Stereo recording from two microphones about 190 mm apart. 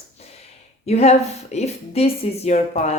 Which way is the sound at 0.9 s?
35° left (ahead or behind).